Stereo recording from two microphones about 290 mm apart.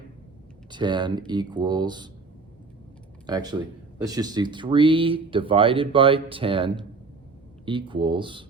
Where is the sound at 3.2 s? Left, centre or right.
Centre.